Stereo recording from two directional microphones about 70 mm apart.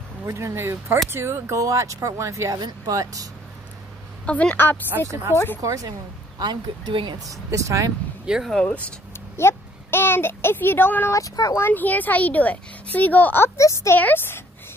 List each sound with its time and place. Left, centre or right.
0.3 s speech: right
1.6 s speech: right
4.3 s a woman's voice: centre; by 5.6 s left
5.6 s speech: right
6.3 s speech: right
7.2 s speech: right
8.3 s speech: centre
8.6 s speech: centre
9.4 s speech: left
11.1 s speech: left
11.6 s a woman's voice: left
13.6 s speech: left
13.9 s a woman's voice: left